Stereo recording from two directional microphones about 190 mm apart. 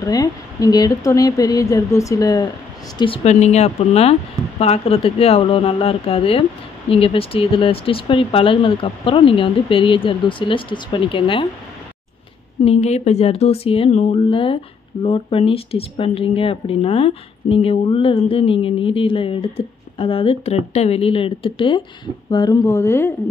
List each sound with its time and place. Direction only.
0.0 s speech: 20° left (ahead or behind)
3.0 s speech: 30° left (ahead or behind)
12.6 s speech: 35° left (ahead or behind); by 23.1 s 15° left (ahead or behind)